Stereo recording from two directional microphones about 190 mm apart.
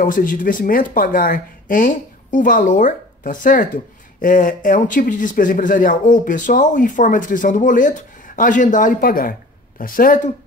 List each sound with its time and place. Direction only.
0.0 s speech: 45° left (ahead or behind)